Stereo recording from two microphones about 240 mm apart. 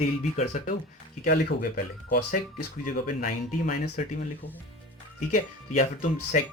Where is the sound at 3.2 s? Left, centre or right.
Left.